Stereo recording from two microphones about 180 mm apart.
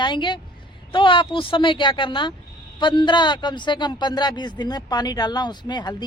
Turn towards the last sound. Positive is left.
turn(degrees=25)  # may be behind; listen again after turning